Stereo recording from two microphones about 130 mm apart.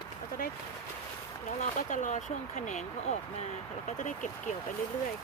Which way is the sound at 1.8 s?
75° left (ahead or behind).